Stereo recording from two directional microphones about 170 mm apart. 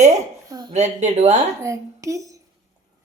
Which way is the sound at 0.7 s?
40° right (ahead or behind).